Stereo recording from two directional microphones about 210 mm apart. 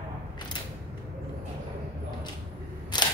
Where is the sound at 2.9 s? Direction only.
20° left (ahead or behind).